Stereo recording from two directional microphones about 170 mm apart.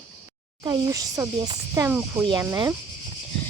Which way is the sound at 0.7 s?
20° right (ahead or behind).